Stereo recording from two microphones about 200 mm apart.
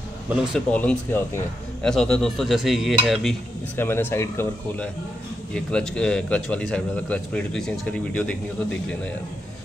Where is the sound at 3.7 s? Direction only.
10° left (ahead or behind).